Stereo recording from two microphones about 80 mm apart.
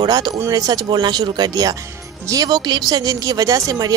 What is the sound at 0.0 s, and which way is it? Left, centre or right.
Speech, right.